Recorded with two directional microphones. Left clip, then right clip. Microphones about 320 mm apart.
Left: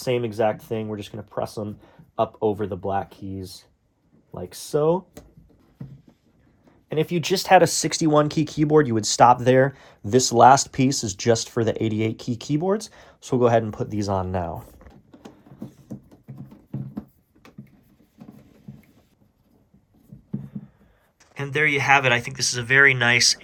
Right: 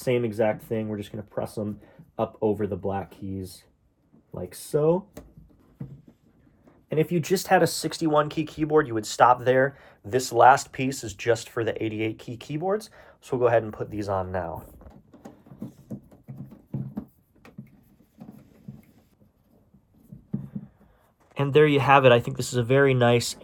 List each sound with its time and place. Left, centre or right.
0.0 s speech: centre
4.7 s speech: centre
5.8 s boat: centre
6.7 s speech: centre
7.3 s speech: centre
14.8 s a sound: centre
18.2 s a sound: centre
20.3 s a sound: centre
21.4 s speech: centre
22.6 s speech: centre